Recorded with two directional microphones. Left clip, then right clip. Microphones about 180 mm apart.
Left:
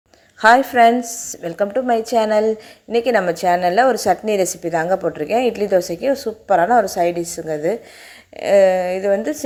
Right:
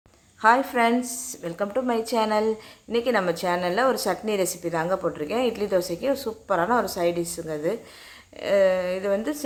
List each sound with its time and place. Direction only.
0.4 s a woman's voice: 25° left (ahead or behind)